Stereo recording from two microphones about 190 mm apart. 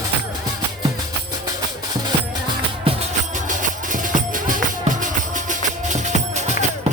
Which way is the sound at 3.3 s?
40° right (ahead or behind).